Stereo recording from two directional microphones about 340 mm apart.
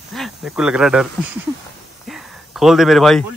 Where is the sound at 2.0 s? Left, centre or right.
Centre.